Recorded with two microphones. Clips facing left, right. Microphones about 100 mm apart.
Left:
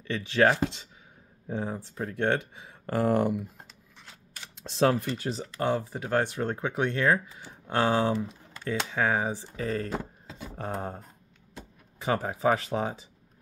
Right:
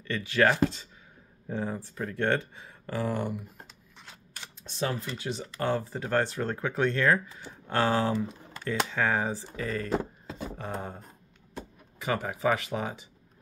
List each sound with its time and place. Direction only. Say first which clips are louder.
0.0 s speech: left 1 dB; 25° left (ahead or behind)
2.9 s speech: left 6 dB; 55° left (ahead or behind)
4.6 s speech: left 8 dB; 90° left; by 5.1 s 70° left (ahead or behind)
5.1 s speech: left 2 dB; 45° left (ahead or behind)
5.4 s speech: even; 20° left (ahead or behind)
9.6 s speech: right 1 dB; 30° left (ahead or behind)
12.0 s speech: left 2 dB; 30° left (ahead or behind)